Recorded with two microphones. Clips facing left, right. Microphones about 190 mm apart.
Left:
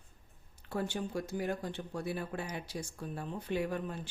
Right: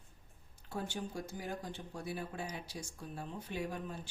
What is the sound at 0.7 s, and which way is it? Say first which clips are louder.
Speech: left 5 dB; 65° left (ahead or behind).